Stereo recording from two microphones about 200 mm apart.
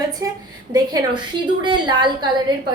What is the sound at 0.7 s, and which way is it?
A woman's voice, 20° right (ahead or behind).